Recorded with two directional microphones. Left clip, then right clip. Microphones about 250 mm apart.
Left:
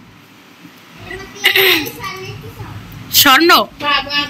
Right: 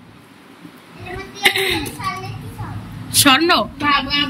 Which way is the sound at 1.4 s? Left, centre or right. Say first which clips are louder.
Left 5 dB; centre.